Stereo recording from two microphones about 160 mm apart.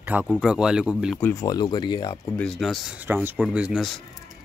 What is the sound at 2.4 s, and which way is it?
Speech, centre (ahead or behind).